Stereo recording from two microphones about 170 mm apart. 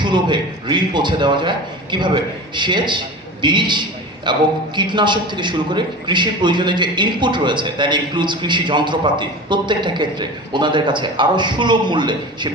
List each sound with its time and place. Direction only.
0.0 s a man's voice: 25° right (ahead or behind)